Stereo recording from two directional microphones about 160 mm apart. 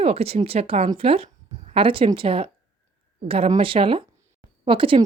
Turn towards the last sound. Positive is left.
turn(degrees=-35)  # may be behind; listen again after turning